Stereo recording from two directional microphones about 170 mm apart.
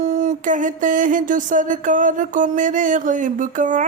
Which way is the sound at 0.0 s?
45° right (ahead or behind).